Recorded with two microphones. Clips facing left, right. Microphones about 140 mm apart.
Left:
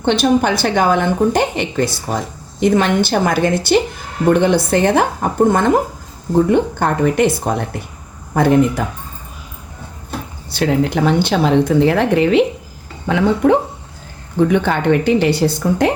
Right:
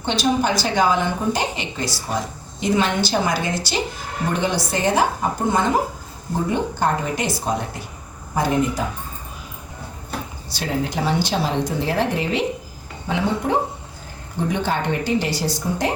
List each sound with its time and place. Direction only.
0.0 s a woman's voice: 60° left (ahead or behind)
10.5 s a woman's voice: 65° left (ahead or behind)